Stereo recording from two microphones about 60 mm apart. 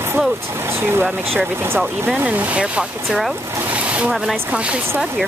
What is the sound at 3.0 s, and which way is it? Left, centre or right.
Speech, centre.